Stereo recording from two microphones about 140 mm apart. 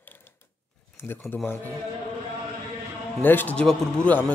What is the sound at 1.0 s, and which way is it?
Speech, 15° left (ahead or behind).